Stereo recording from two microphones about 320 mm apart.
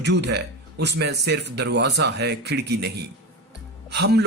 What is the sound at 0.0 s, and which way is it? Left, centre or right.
A man's voice, right.